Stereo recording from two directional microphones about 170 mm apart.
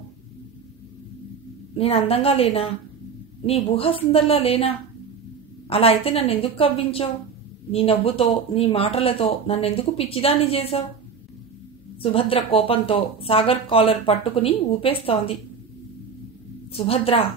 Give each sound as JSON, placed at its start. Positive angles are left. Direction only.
{"t": 1.7, "sound": "speech", "side_deg": 35}
{"t": 12.0, "sound": "speech", "side_deg": 35}
{"t": 16.7, "sound": "speech", "side_deg": 35}